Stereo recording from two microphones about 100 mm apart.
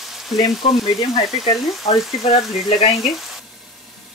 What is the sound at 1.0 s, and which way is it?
Speech, 65° left (ahead or behind).